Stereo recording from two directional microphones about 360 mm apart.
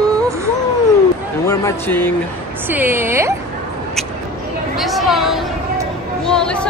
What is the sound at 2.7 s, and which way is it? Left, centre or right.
Speech, centre.